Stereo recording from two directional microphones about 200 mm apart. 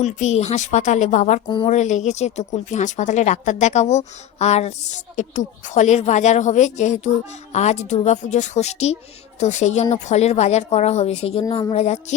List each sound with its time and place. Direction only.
0.0 s speech: 35° left (ahead or behind)
1.5 s speech: 25° left (ahead or behind)
1.7 s speech: 35° left (ahead or behind)
11.4 s speech: 20° left (ahead or behind)
11.7 s speech: 35° left (ahead or behind)